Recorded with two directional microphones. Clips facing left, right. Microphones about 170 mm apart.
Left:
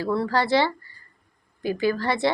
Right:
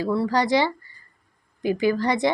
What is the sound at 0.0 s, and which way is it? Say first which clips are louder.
Speech: right 1 dB; 15° right (ahead or behind).